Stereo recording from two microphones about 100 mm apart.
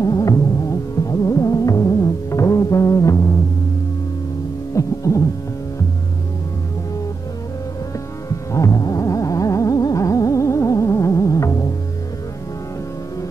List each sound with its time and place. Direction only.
0.0 s music: 35° left (ahead or behind)
4.7 s music: 35° left (ahead or behind)
8.3 s music: 35° left (ahead or behind)